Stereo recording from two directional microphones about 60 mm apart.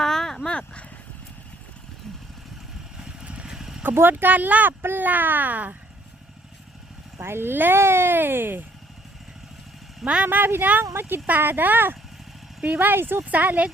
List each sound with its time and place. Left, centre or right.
0.0 s a sound: centre
3.0 s vehicle: centre
3.8 s speech: right
7.2 s speech: right
10.0 s speech: centre
10.2 s speech: right
13.3 s a woman's voice: right